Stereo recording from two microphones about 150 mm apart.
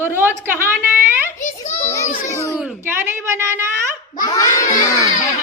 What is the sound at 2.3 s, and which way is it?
Speech, 20° left (ahead or behind).